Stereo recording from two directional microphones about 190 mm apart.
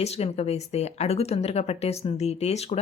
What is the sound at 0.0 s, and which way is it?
Speech, 35° left (ahead or behind).